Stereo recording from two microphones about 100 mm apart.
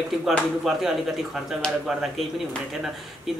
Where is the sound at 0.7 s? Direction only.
5° right (ahead or behind).